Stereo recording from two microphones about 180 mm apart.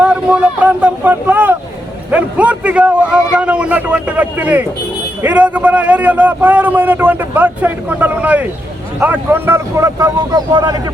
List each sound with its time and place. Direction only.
0.0 s vehicle: 5° right (ahead or behind)
2.0 s a man's voice: 5° right (ahead or behind); by 10.8 s 25° right (ahead or behind)